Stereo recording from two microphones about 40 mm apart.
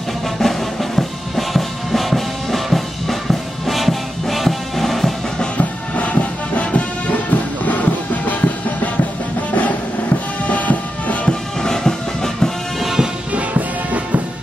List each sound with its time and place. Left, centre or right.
0.4 s music: centre
5.6 s music: left
11.6 s music: centre
12.8 s music: centre
13.3 s music: right